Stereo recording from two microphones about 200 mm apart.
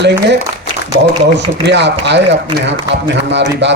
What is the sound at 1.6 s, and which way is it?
A man's voice, 60° right (ahead or behind).